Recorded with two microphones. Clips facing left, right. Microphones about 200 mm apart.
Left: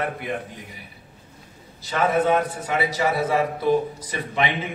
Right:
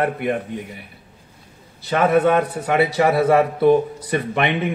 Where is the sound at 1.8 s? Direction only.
60° right (ahead or behind).